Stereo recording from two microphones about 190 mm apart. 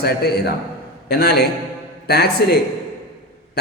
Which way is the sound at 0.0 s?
55° left (ahead or behind).